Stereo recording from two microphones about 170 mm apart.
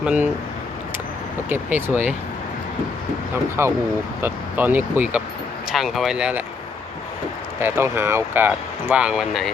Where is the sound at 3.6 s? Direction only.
15° right (ahead or behind).